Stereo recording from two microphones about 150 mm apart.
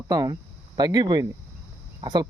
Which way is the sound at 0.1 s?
25° right (ahead or behind).